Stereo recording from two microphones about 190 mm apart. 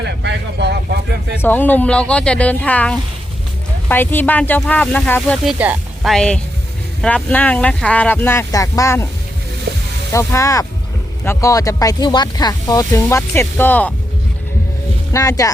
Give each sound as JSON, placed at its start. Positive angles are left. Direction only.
{"t": 0.0, "sound": "vehicle", "side_deg": -65}
{"t": 1.4, "sound": "speech", "side_deg": 10}
{"t": 5.5, "sound": "speech", "side_deg": -5}
{"t": 10.1, "sound": "speech", "side_deg": 15}
{"t": 15.1, "sound": "speech", "side_deg": 15}